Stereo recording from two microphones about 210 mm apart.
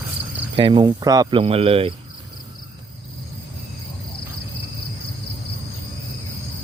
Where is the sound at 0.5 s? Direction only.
25° right (ahead or behind).